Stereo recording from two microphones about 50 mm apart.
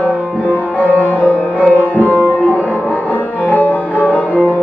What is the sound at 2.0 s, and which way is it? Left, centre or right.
Music, right.